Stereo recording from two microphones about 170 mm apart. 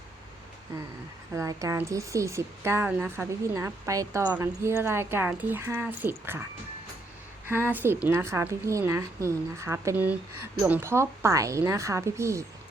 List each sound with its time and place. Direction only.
1.4 s a woman's voice: 20° right (ahead or behind)
7.4 s a woman's voice: 10° right (ahead or behind)